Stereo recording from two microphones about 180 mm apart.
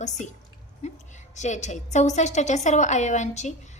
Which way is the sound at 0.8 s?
40° left (ahead or behind).